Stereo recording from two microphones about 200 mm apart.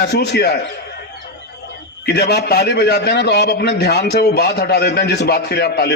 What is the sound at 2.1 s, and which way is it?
A man's voice, 55° left (ahead or behind).